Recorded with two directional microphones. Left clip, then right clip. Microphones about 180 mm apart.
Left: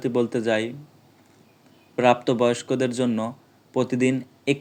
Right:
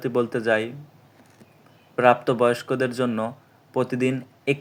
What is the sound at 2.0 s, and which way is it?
Speech, 15° left (ahead or behind).